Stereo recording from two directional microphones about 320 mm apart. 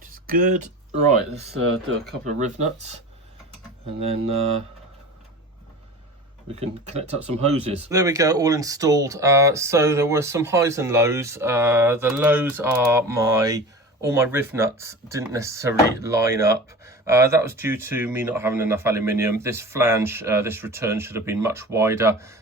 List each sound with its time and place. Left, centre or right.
0.0 s a sound: right
2.2 s speech: right
4.0 s speech: centre
6.6 s speech: centre